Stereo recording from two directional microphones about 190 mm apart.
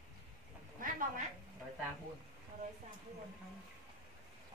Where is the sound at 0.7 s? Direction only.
45° right (ahead or behind).